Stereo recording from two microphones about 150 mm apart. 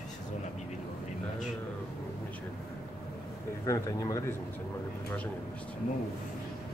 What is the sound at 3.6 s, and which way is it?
Speech, 20° left (ahead or behind).